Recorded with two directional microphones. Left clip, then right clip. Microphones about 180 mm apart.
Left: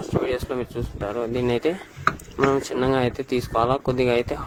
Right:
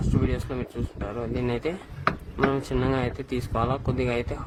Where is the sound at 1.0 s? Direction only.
45° left (ahead or behind).